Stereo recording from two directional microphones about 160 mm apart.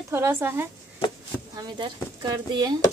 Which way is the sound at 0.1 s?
15° right (ahead or behind).